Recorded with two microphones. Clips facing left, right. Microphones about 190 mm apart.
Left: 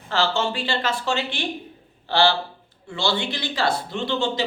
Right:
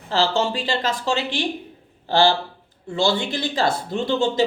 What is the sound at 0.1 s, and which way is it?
Speech, 35° right (ahead or behind).